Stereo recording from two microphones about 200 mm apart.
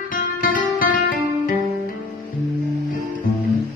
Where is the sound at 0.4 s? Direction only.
45° left (ahead or behind).